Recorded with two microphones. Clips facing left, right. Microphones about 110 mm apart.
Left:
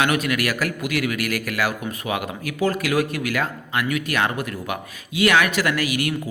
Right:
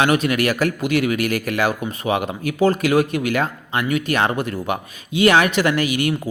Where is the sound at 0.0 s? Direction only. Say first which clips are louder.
Right 4 dB; 30° right (ahead or behind).